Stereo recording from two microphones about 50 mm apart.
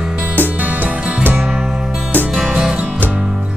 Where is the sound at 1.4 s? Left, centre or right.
Centre.